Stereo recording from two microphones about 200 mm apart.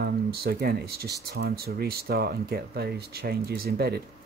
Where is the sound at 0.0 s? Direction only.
50° right (ahead or behind).